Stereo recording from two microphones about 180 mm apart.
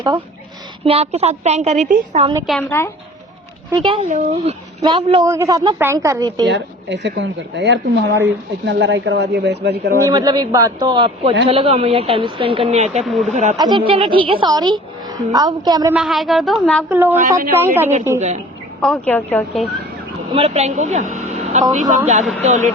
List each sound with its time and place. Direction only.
0.9 s speech: 35° right (ahead or behind)
2.5 s a woman's voice: 10° left (ahead or behind)
3.7 s a woman's voice: 25° right (ahead or behind)
5.2 s a woman's voice: 15° right (ahead or behind)
6.4 s speech: 80° right
10.1 s a woman's voice: 25° right (ahead or behind); by 13.6 s 40° right (ahead or behind)
13.6 s a woman's voice: 25° right (ahead or behind)
16.0 s a woman's voice: centre (ahead or behind)
16.9 s a woman's voice: 10° right (ahead or behind)
18.8 s a woman's voice: 5° left (ahead or behind)
20.3 s a man's voice: 35° right (ahead or behind)